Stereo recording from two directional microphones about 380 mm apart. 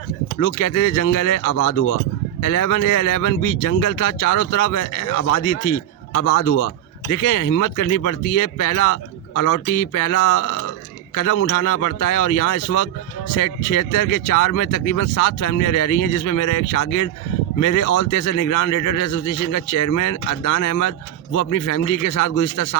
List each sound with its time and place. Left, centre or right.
0.3 s speech: left